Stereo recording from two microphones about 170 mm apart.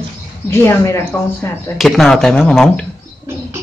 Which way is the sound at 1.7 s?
Centre (ahead or behind).